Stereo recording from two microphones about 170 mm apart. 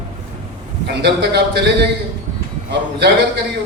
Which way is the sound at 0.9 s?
80° right.